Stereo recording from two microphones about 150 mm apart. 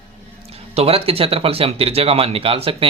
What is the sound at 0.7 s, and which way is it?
Speech, 40° right (ahead or behind).